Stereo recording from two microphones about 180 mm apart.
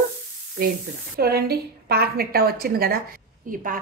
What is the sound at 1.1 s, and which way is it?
A woman's voice, 60° right (ahead or behind).